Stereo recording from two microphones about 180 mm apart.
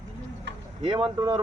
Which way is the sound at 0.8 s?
30° right (ahead or behind).